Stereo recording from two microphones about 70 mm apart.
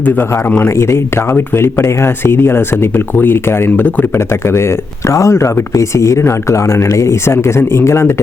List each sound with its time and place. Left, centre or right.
0.0 s a man's voice: left
0.8 s speech: left
4.4 s speech: left